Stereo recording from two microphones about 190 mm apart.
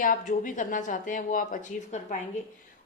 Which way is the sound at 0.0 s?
45° left (ahead or behind).